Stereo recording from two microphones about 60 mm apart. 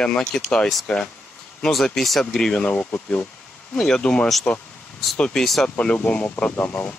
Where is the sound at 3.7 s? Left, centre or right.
Centre.